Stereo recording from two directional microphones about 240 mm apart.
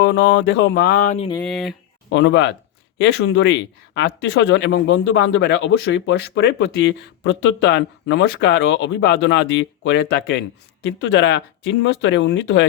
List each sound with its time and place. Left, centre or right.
0.0 s speech: left
1.4 s speech: centre
2.0 s speech: left